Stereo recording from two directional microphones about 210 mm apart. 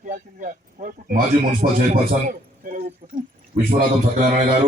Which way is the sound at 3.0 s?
40° right (ahead or behind).